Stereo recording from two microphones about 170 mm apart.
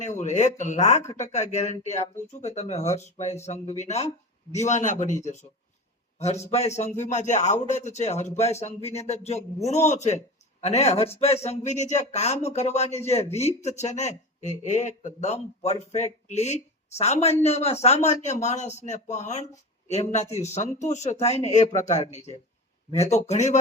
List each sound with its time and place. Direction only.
0.0 s a man's voice: 45° left (ahead or behind)